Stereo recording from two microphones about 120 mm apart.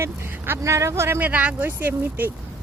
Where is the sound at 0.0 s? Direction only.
20° right (ahead or behind).